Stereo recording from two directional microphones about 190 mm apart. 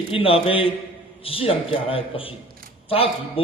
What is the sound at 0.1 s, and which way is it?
A man's voice, 30° left (ahead or behind).